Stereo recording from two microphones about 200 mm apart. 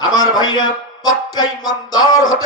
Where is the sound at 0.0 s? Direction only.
20° left (ahead or behind).